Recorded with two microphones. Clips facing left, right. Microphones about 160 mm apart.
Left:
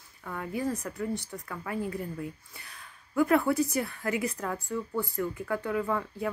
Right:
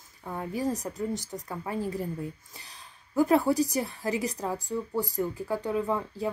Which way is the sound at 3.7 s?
35° right (ahead or behind).